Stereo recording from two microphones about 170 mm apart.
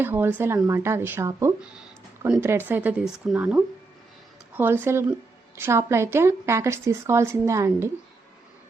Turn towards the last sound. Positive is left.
turn(degrees=-15)  # may be behind; listen again after turning